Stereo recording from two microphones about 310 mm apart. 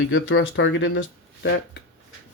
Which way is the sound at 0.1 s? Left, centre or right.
Left.